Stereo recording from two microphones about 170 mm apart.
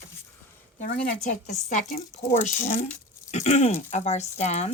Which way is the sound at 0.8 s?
50° left (ahead or behind).